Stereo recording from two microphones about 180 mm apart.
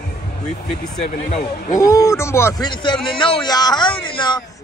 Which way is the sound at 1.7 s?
20° left (ahead or behind).